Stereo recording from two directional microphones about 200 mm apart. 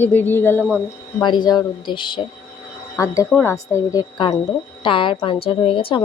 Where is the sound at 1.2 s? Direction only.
20° left (ahead or behind).